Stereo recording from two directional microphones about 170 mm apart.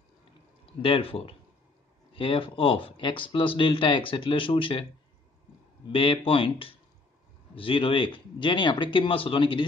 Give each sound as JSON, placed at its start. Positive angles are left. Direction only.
{"t": 0.7, "sound": "speech", "side_deg": 35}
{"t": 5.9, "sound": "speech", "side_deg": 30}